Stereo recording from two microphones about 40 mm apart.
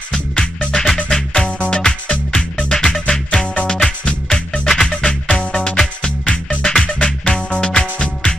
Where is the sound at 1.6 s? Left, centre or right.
Left.